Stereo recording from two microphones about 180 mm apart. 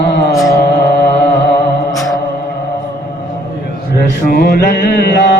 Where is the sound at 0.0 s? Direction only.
70° left (ahead or behind).